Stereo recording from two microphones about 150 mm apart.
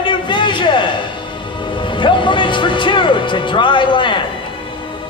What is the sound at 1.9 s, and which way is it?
Music, 35° left (ahead or behind).